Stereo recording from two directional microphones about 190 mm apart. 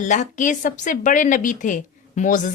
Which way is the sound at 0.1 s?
40° left (ahead or behind).